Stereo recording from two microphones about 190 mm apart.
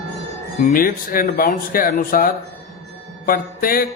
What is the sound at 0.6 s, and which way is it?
Speech, 50° left (ahead or behind).